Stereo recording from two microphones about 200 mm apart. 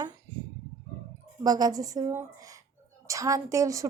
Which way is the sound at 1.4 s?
20° right (ahead or behind).